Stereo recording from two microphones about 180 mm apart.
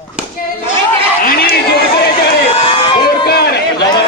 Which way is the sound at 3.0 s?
60° left (ahead or behind).